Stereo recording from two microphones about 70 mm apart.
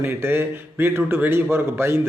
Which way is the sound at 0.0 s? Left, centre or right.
Right.